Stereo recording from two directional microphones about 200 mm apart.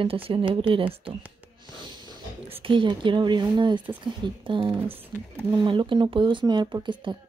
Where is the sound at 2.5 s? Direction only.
25° right (ahead or behind).